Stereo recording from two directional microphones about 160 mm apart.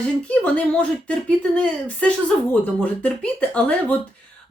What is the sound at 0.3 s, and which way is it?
Speech, 10° left (ahead or behind).